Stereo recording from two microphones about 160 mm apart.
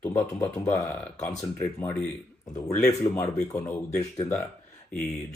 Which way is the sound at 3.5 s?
20° left (ahead or behind).